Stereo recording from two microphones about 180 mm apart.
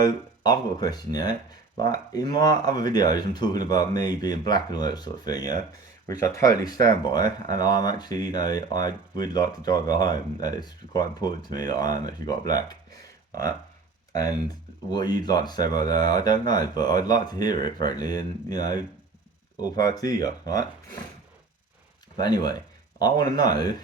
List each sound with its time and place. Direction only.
0.0 s speech: 20° left (ahead or behind)
14.9 s speech: 25° left (ahead or behind)
22.2 s speech: 20° left (ahead or behind)